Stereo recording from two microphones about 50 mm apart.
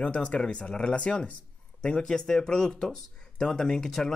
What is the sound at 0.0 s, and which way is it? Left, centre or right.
Speech, left.